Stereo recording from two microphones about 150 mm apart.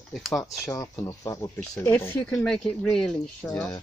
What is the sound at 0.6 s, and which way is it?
Speech, 20° left (ahead or behind).